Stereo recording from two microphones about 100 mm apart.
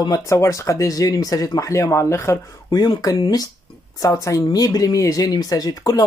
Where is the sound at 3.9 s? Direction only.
35° left (ahead or behind).